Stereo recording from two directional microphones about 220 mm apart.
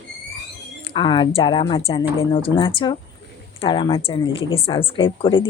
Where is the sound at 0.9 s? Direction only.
20° left (ahead or behind).